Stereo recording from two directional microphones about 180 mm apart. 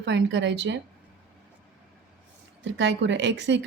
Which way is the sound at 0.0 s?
80° right.